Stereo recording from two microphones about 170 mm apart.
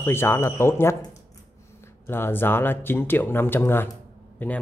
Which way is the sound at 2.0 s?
15° left (ahead or behind).